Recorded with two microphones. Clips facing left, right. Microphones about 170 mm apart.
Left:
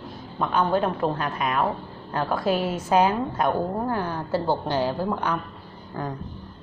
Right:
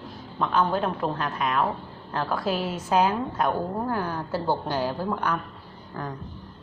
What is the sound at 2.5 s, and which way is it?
Speech, 45° left (ahead or behind).